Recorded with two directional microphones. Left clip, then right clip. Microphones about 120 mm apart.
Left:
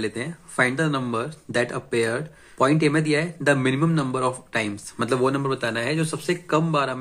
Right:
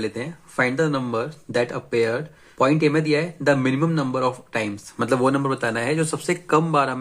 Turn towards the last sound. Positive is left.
turn(degrees=-45)  # may be behind; listen again after turning